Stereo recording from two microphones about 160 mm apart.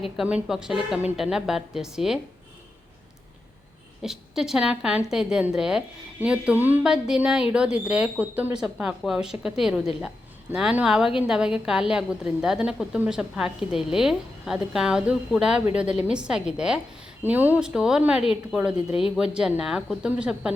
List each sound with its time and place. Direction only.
0.2 s a woman's voice: 5° right (ahead or behind)
4.0 s a woman's voice: 5° right (ahead or behind)
18.9 s speech: 35° left (ahead or behind)
19.1 s a woman's voice: 5° right (ahead or behind)